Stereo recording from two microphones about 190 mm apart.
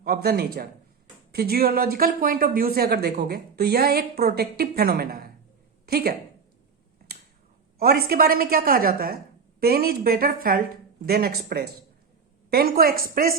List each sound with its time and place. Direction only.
0.0 s a woman's voice: 55° right (ahead or behind)
7.8 s speech: 55° right (ahead or behind)